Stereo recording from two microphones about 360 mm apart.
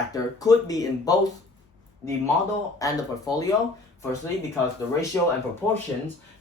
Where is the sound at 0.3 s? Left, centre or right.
Centre.